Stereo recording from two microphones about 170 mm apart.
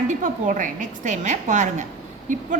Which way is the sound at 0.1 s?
50° right (ahead or behind).